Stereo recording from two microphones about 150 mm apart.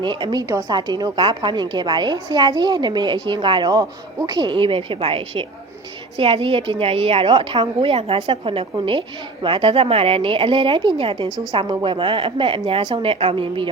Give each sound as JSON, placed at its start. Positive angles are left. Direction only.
{"t": 0.0, "sound": "a woman's voice", "side_deg": -30}